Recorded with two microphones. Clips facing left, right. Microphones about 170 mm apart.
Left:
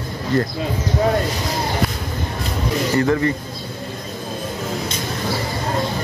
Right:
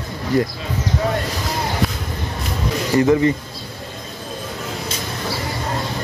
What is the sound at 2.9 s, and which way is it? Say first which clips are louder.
Speech: right 4 dB; 15° right (ahead or behind).